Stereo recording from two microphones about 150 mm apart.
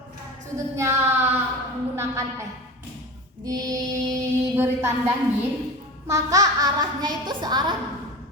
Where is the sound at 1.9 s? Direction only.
20° right (ahead or behind).